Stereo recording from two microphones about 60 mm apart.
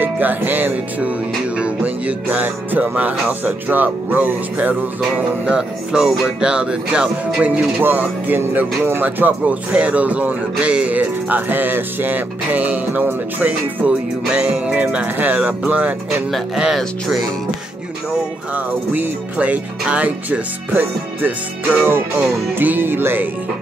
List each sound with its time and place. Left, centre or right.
0.0 s music: right
2.2 s speech: right
5.5 s speech: centre
7.8 s speech: right
18.5 s speech: right
21.7 s music: right